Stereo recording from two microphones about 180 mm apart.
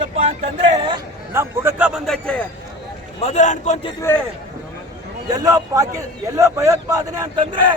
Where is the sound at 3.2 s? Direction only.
40° left (ahead or behind).